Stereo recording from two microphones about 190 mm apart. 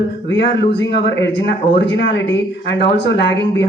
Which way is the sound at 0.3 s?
65° left (ahead or behind).